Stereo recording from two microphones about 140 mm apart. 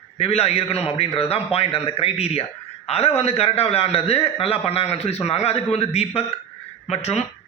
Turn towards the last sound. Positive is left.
turn(degrees=50)  # may be behind; listen again after turning